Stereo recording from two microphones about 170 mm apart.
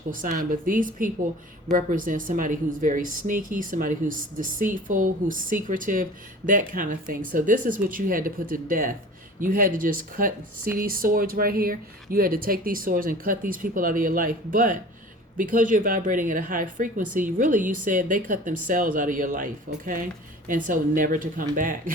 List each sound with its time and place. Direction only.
0.1 s speech: 50° right (ahead or behind)